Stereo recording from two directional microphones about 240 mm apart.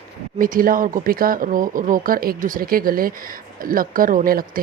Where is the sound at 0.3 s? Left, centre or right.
Right.